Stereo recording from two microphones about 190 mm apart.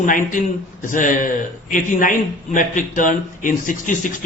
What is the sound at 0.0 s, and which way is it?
A man's voice, 45° left (ahead or behind).